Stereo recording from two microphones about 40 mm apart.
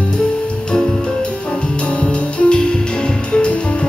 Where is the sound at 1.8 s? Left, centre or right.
Left.